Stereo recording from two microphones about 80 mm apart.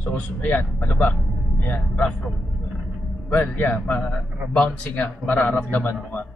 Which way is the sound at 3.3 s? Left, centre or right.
Left.